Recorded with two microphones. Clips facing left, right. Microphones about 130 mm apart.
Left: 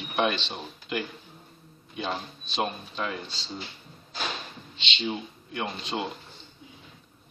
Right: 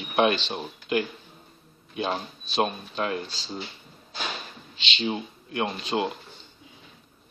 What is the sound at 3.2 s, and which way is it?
Speech, 5° right (ahead or behind).